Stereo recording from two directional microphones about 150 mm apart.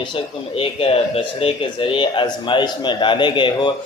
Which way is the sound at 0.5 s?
40° left (ahead or behind).